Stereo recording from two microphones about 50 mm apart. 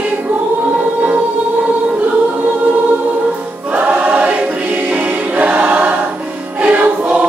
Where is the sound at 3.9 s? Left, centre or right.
Right.